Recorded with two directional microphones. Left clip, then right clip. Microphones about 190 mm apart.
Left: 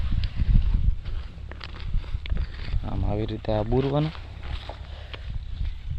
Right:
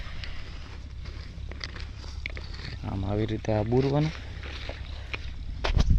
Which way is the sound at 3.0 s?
5° left (ahead or behind).